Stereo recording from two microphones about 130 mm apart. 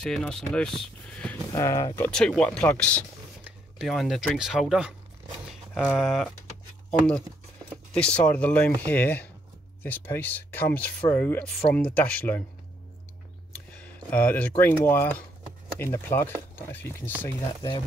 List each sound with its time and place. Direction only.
0.0 s speech: 5° left (ahead or behind)
1.5 s speech: 25° left (ahead or behind)
2.0 s speech: 5° left (ahead or behind)
5.5 s a sound: 10° right (ahead or behind)
5.9 s speech: centre (ahead or behind)
13.7 s a sound: 10° left (ahead or behind)
14.6 s speech: 15° left (ahead or behind)
17.6 s speech: 35° left (ahead or behind)